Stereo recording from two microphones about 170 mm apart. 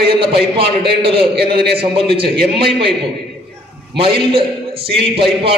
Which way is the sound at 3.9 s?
30° right (ahead or behind).